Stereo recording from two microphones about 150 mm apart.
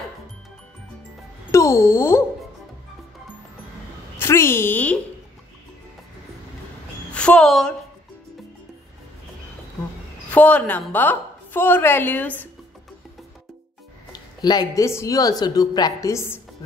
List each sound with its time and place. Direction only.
1.5 s speech: 20° left (ahead or behind)
4.2 s a woman's voice: 15° left (ahead or behind)
7.2 s a woman's voice: 5° left (ahead or behind)
10.3 s a woman's voice: 10° left (ahead or behind)
14.1 s speech: 30° left (ahead or behind)